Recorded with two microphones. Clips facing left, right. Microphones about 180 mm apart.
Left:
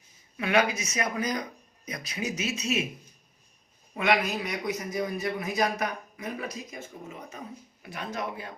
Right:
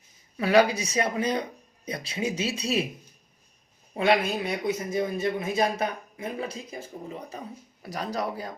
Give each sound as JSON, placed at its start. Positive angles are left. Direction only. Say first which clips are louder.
{"t": 0.3, "sound": "speech", "louder": "right 5 dB", "side_deg": -35}
{"t": 3.9, "sound": "a man's voice", "louder": "right 3 dB", "side_deg": -30}